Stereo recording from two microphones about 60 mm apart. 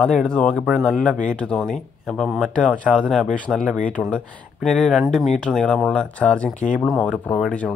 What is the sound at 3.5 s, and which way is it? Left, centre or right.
Speech, centre.